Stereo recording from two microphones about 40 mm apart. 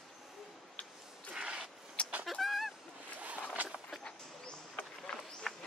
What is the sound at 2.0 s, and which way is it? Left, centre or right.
Fowl, left.